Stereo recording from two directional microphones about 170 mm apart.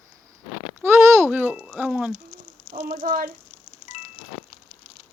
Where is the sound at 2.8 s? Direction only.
55° right (ahead or behind).